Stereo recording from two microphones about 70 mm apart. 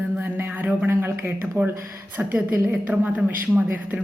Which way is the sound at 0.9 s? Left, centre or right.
Right.